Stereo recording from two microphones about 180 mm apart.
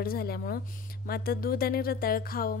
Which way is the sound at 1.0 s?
55° left (ahead or behind).